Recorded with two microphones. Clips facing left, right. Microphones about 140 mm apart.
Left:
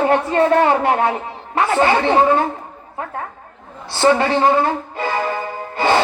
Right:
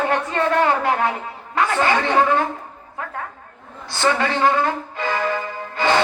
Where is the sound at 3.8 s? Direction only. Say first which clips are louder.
Left 5 dB; 30° left (ahead or behind).